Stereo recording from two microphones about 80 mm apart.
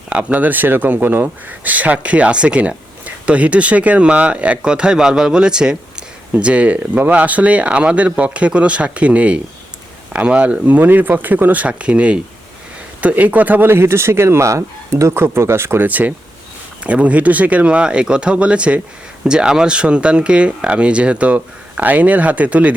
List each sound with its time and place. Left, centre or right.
0.1 s speech: centre
15.9 s speech: right